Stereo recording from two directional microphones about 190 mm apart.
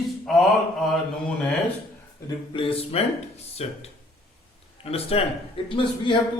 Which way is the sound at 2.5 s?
30° left (ahead or behind).